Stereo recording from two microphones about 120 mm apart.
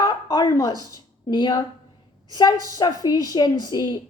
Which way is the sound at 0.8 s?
35° left (ahead or behind).